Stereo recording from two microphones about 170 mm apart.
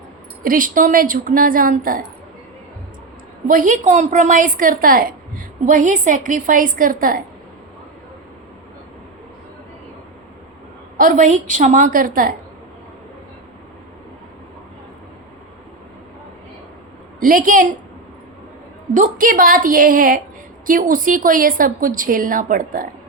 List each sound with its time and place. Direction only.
0.4 s speech: 55° right (ahead or behind)
3.4 s a woman's voice: 50° right (ahead or behind)
10.9 s a woman's voice: 50° right (ahead or behind)
17.2 s a woman's voice: 55° right (ahead or behind)
18.9 s a woman's voice: 50° right (ahead or behind)